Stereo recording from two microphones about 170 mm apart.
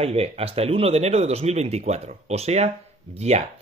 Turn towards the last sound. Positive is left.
turn(degrees=-40)  # may be behind; listen again after turning